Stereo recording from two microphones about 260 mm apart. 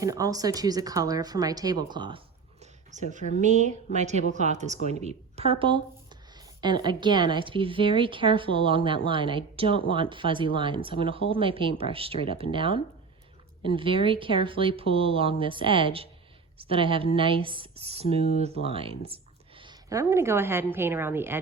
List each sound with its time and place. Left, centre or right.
0.0 s a woman's voice: centre